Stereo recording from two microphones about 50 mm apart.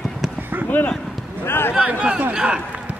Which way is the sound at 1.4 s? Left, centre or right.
Left.